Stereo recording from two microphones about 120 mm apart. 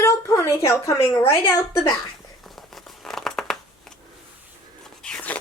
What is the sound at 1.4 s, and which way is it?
Speech, 35° left (ahead or behind).